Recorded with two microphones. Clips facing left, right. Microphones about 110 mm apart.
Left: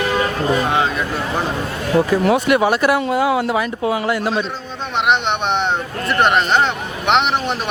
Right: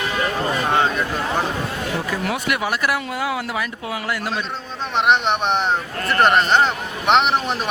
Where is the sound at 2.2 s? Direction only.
30° left (ahead or behind).